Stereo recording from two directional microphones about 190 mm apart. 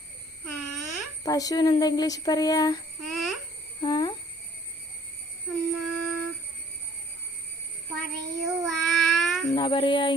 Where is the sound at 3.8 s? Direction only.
20° left (ahead or behind).